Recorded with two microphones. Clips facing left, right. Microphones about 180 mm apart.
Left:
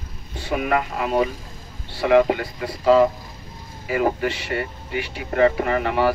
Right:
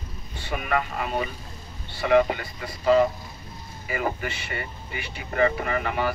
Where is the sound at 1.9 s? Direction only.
75° left (ahead or behind).